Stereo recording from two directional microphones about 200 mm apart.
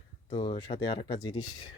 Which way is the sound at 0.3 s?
25° left (ahead or behind).